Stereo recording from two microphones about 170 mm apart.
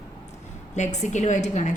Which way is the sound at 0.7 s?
45° left (ahead or behind).